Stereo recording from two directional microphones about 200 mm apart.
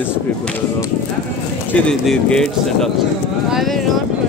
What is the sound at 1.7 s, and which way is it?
Speech, 5° left (ahead or behind).